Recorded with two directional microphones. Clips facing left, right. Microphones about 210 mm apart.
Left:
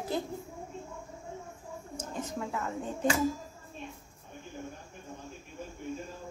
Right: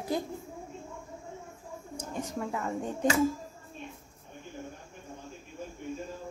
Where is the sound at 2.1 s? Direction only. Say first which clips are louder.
Right 1 dB; 10° right (ahead or behind).